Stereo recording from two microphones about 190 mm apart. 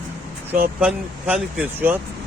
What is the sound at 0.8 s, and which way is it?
Speech, 5° right (ahead or behind).